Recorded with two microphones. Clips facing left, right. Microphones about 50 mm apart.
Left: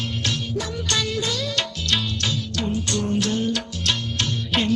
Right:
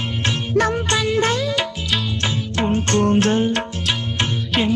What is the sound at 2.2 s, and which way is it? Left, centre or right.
Music, right.